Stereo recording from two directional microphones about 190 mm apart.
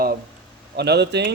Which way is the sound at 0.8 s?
60° right (ahead or behind).